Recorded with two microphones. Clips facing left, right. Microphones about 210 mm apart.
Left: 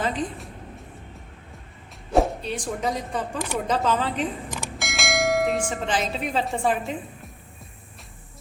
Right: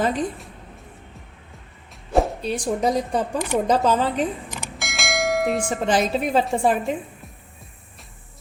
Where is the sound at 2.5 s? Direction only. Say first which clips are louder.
Right 6 dB; 35° right (ahead or behind).